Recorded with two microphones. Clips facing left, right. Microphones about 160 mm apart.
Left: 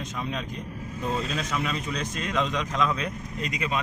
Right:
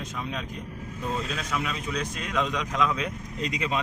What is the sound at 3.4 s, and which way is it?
Speech, 30° right (ahead or behind).